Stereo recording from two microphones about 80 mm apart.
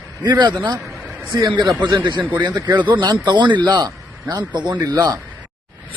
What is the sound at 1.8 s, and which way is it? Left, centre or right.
Speech, right.